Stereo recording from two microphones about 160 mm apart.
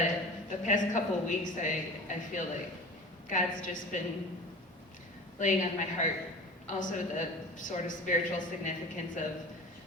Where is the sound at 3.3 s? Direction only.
50° left (ahead or behind).